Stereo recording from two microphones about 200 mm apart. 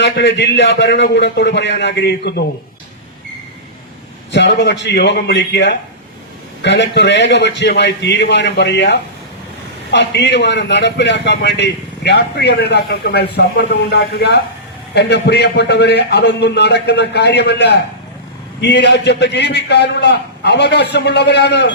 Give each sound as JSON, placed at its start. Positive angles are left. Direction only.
{"t": 0.0, "sound": "a man's voice", "side_deg": 60}
{"t": 4.3, "sound": "a man's voice", "side_deg": 60}